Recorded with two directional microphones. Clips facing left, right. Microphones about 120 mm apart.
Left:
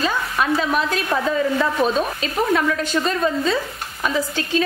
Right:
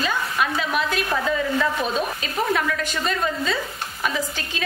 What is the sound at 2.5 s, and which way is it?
Speech, 35° left (ahead or behind).